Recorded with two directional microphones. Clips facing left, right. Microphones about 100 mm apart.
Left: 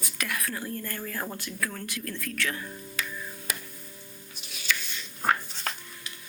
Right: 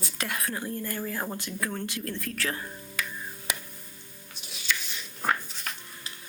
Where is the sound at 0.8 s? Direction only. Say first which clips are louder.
Right 2 dB; 15° right (ahead or behind); by 2.7 s 35° right (ahead or behind).